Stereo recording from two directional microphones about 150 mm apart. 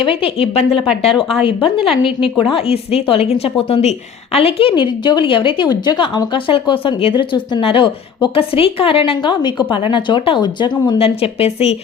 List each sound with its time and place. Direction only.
0.0 s a woman's voice: 35° left (ahead or behind)
1.1 s a woman's voice: 5° right (ahead or behind)
1.5 s a woman's voice: 35° left (ahead or behind)